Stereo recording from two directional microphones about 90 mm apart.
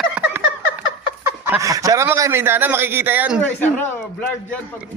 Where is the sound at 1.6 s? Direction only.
40° right (ahead or behind); by 3.3 s 20° right (ahead or behind).